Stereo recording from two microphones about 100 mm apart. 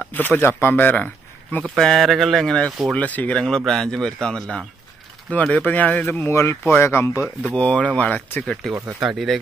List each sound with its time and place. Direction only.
0.0 s speech: 15° left (ahead or behind)
1.6 s speech: 5° left (ahead or behind); by 7.2 s 25° left (ahead or behind)
7.4 s speech: 10° left (ahead or behind)
9.0 s speech: 5° right (ahead or behind)